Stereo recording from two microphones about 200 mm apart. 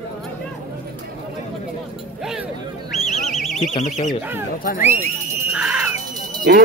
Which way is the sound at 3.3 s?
Centre (ahead or behind).